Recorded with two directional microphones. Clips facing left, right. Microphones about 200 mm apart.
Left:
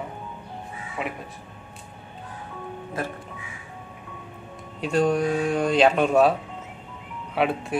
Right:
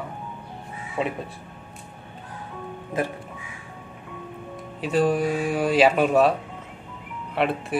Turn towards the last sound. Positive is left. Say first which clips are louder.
# even
turn(degrees=0)  # may be behind; listen again after turning